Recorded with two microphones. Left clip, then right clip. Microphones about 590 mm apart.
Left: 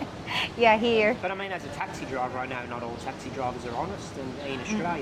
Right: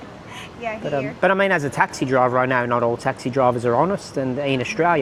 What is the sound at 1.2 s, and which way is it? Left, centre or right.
Speech, right.